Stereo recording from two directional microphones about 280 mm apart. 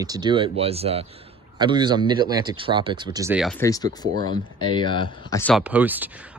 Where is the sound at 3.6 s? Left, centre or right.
Centre.